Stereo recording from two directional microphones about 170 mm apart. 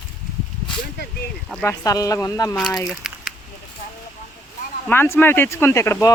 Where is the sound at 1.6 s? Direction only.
20° left (ahead or behind).